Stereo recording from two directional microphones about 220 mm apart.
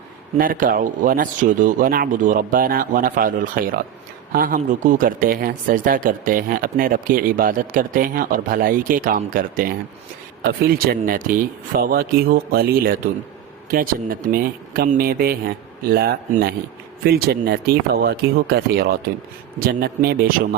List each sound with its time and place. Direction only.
0.3 s speech: 40° right (ahead or behind)